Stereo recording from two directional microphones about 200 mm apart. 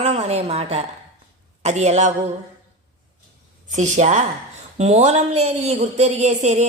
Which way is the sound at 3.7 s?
35° right (ahead or behind).